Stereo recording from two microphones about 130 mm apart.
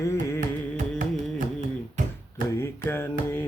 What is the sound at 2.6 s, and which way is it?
Music, 20° left (ahead or behind).